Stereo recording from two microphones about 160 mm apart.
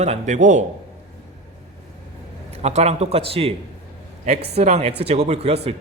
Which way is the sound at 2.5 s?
40° right (ahead or behind).